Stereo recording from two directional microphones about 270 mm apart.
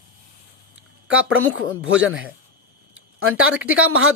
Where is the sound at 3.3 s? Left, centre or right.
Right.